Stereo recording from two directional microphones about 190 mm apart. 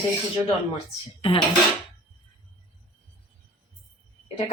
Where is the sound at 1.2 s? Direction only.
30° left (ahead or behind).